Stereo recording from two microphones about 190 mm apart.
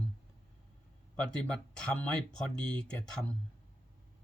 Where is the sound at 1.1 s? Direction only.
5° left (ahead or behind).